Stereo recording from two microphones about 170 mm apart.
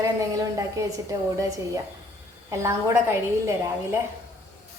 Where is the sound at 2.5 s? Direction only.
15° right (ahead or behind).